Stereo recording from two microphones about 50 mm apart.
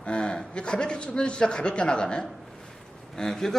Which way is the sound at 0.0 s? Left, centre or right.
Left.